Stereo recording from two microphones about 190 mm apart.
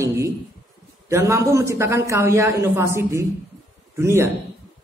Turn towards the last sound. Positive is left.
turn(degrees=-15)  # may be behind; listen again after turning